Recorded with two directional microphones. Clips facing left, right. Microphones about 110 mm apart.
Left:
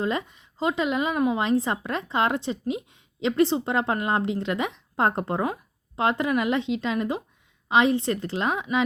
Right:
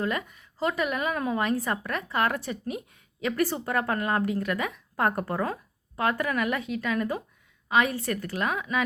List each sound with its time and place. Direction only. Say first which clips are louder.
0.0 s speech: left 3 dB; 25° left (ahead or behind)